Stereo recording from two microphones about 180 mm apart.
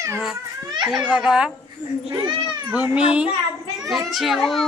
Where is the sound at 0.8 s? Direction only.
5° right (ahead or behind).